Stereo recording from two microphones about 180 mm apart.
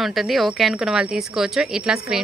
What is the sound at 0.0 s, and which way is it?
A woman's voice, centre (ahead or behind).